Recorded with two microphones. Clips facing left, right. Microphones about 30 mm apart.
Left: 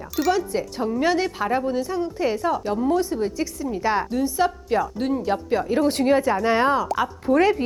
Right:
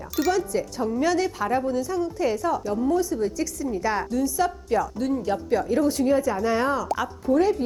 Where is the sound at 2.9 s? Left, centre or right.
Left.